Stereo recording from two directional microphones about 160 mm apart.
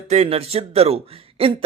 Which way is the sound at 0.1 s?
40° right (ahead or behind).